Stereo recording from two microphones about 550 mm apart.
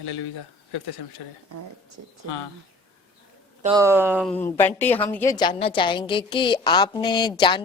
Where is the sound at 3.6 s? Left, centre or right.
Centre.